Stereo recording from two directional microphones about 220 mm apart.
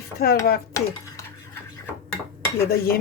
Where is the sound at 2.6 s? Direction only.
45° left (ahead or behind).